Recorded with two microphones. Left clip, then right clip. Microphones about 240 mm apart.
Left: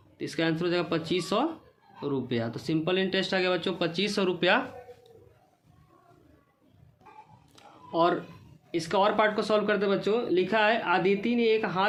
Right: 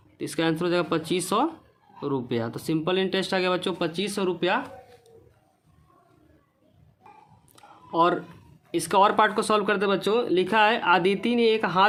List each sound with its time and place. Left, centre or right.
0.2 s speech: right
7.5 s a sound: right
8.7 s speech: right